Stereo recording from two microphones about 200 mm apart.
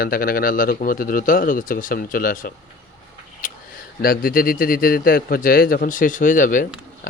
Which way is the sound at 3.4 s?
40° left (ahead or behind).